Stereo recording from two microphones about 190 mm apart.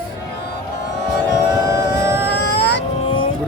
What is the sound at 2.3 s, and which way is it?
Cat, 60° left (ahead or behind).